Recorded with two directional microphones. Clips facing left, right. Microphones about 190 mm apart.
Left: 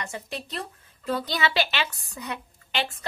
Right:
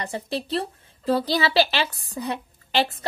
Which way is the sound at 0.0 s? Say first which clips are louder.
Right 6 dB; 35° right (ahead or behind).